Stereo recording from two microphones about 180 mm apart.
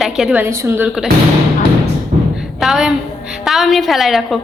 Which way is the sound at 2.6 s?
Centre (ahead or behind).